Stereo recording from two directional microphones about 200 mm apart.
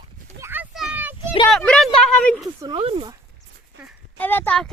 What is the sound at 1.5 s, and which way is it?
Speech, 5° left (ahead or behind).